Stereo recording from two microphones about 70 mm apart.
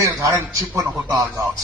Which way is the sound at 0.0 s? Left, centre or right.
Right.